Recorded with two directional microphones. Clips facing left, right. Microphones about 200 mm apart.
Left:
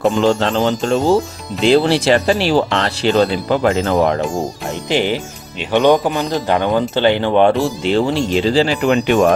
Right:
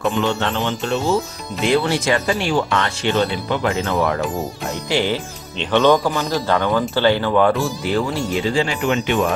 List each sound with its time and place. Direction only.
0.0 s speech: 35° left (ahead or behind)
4.9 s a man's voice: 15° left (ahead or behind); by 9.2 s 40° left (ahead or behind)